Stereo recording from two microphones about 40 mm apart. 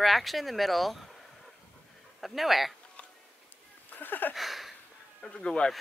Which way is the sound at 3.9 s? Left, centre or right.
Left.